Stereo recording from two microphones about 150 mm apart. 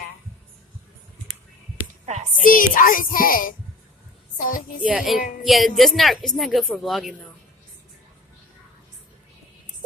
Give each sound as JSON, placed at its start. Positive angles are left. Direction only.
{"t": 2.4, "sound": "a woman's voice", "side_deg": 65}
{"t": 4.8, "sound": "a woman's voice", "side_deg": -5}